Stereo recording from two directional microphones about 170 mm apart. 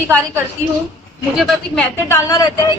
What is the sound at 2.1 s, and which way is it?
Speech, 20° left (ahead or behind).